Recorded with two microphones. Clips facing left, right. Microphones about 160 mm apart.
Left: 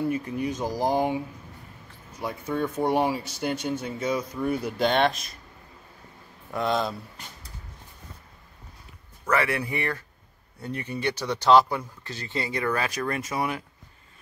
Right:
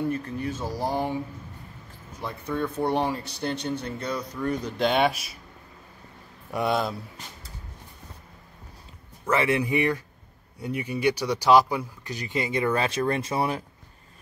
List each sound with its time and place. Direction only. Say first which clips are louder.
0.1 s speech: left 2 dB; 15° left (ahead or behind)
2.2 s speech: left 1 dB; 10° left (ahead or behind)
4.8 s speech: even; 5° right (ahead or behind)
6.5 s speech: right 1 dB; 10° right (ahead or behind)
9.3 s speech: right 2 dB; 20° right (ahead or behind)